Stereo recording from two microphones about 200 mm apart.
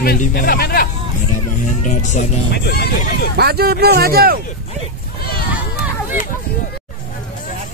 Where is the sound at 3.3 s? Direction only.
50° right (ahead or behind).